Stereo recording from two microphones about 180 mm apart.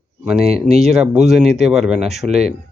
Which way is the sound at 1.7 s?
Centre (ahead or behind).